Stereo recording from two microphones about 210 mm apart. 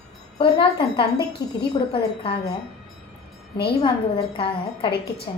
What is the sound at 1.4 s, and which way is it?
Speech, 50° left (ahead or behind).